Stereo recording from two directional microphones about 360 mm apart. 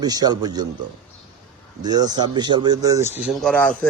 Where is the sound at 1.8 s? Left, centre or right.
Centre.